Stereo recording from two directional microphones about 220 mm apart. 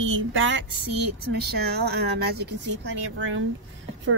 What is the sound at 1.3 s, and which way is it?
Speech, 50° right (ahead or behind).